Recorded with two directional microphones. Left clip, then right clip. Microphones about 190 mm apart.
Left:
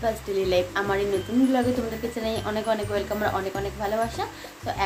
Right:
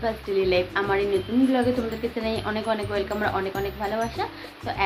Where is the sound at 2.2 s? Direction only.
15° left (ahead or behind).